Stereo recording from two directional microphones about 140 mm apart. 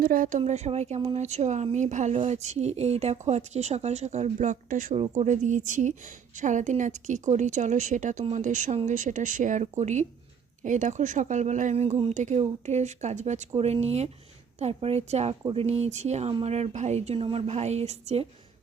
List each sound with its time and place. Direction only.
0.0 s speech: 85° right; by 18.3 s 50° right (ahead or behind)